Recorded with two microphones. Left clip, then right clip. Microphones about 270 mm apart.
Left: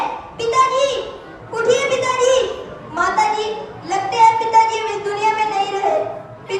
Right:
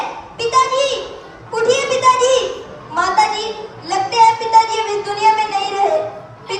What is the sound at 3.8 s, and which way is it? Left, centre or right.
Child singing, right.